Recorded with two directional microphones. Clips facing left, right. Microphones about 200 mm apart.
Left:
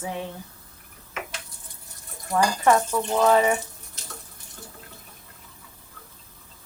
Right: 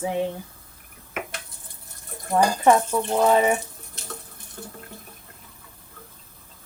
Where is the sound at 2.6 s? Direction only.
15° right (ahead or behind).